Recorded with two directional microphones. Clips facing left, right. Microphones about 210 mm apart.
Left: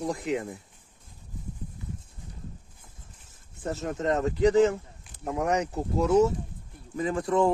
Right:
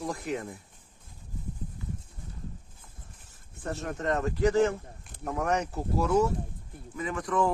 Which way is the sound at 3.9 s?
20° left (ahead or behind).